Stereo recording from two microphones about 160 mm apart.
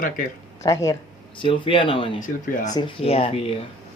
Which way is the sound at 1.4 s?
35° left (ahead or behind).